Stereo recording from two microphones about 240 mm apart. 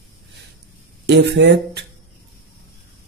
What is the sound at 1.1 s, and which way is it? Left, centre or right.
Speech, right.